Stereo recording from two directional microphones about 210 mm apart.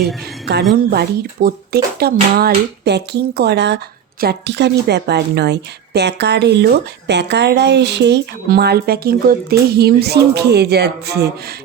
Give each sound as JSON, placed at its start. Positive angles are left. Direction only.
{"t": 0.7, "sound": "a woman's voice", "side_deg": -50}